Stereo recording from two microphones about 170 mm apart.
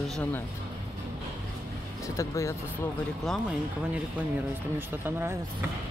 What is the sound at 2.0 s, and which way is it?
Speech, 20° left (ahead or behind).